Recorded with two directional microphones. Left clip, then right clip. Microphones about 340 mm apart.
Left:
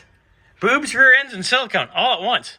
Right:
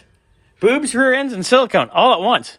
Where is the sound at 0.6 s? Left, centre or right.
Centre.